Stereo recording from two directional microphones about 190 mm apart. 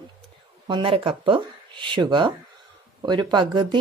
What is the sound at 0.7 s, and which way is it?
Speech, 30° right (ahead or behind).